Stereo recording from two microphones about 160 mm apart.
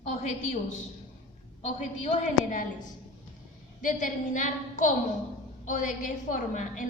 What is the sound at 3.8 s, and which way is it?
A woman's voice, 55° left (ahead or behind).